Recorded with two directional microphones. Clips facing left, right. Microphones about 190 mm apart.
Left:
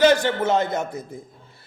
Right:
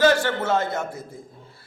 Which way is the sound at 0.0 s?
20° left (ahead or behind).